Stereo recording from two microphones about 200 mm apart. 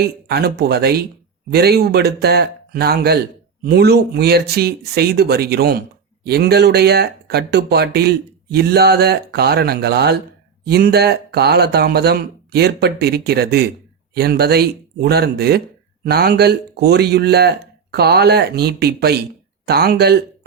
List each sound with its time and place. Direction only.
0.0 s speech: 50° right (ahead or behind)